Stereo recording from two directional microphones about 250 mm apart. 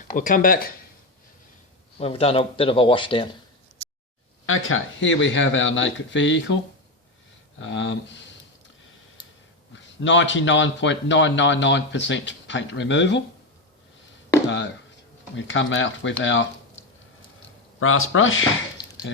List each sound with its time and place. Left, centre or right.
0.1 s speech: left
2.0 s speech: left
4.4 s speech: left
7.6 s speech: left
10.0 s speech: left
15.4 s speech: left
17.7 s speech: left